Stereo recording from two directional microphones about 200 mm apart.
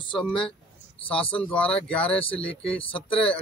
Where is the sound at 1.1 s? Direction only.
25° left (ahead or behind).